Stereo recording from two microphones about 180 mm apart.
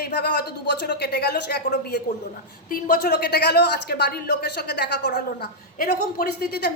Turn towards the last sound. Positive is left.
turn(degrees=65)  # may be behind; listen again after turning